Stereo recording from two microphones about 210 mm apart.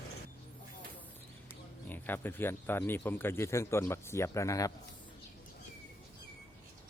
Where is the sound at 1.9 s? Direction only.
10° left (ahead or behind).